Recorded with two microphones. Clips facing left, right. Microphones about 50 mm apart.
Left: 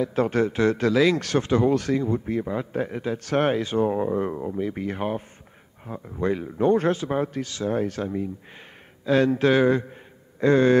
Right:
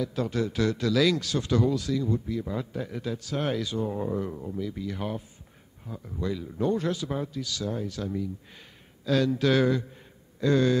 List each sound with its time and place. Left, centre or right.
0.0 s a man's voice: left
1.2 s a man's voice: left
3.2 s a man's voice: left